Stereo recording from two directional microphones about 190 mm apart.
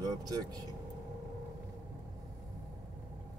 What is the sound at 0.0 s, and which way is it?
Speech, 20° right (ahead or behind).